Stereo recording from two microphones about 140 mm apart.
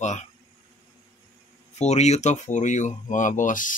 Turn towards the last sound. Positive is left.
turn(degrees=70)  # may be behind; listen again after turning